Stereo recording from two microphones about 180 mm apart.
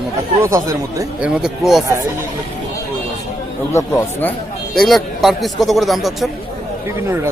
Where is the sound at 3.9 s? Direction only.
10° left (ahead or behind).